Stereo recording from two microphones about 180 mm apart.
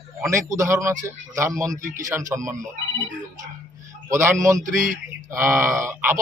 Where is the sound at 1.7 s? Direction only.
45° right (ahead or behind).